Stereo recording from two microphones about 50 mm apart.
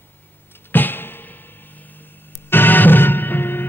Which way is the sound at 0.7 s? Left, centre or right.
Left.